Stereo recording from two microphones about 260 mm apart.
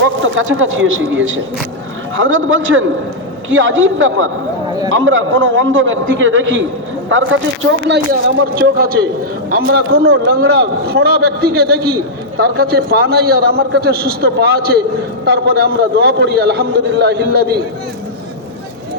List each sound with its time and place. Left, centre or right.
0.0 s a man's voice: right